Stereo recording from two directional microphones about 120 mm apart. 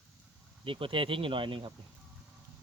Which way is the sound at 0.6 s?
45° right (ahead or behind).